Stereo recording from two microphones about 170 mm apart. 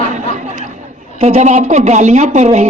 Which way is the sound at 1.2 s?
40° right (ahead or behind).